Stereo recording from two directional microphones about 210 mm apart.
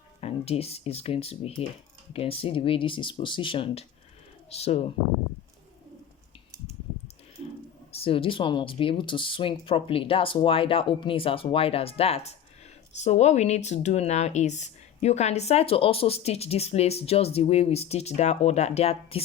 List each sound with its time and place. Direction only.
0.2 s speech: 30° left (ahead or behind)
7.9 s speech: 25° left (ahead or behind)